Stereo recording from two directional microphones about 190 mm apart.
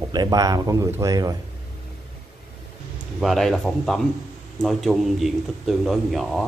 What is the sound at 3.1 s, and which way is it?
A man's voice, centre (ahead or behind).